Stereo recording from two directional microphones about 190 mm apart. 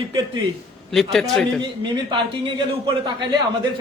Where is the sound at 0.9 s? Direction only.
Centre (ahead or behind).